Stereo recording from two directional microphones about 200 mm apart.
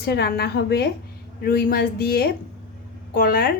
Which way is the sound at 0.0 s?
55° left (ahead or behind).